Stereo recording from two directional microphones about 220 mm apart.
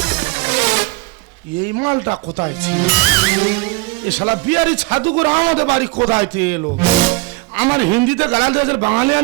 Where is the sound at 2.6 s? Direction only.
10° right (ahead or behind); by 5.7 s 30° right (ahead or behind).